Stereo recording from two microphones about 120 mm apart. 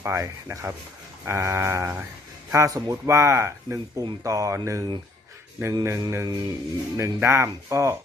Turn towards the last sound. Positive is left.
turn(degrees=-25)  # may be behind; listen again after turning